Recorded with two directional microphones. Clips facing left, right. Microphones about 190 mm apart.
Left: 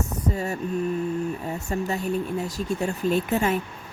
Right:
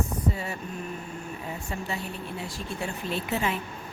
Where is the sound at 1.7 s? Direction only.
45° left (ahead or behind).